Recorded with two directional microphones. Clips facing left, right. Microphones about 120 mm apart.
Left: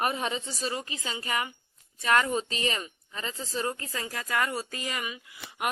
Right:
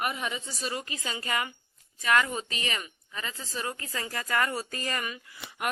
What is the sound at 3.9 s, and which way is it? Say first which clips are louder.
Speech: right 1 dB; 15° left (ahead or behind).